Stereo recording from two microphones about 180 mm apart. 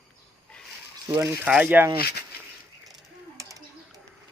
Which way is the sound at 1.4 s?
10° right (ahead or behind).